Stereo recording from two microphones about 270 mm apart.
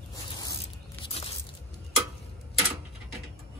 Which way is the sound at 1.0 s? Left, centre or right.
Left.